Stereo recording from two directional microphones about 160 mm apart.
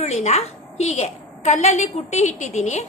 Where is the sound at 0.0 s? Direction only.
45° left (ahead or behind).